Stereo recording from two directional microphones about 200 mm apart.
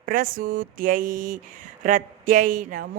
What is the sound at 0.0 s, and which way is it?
Speech, 45° right (ahead or behind).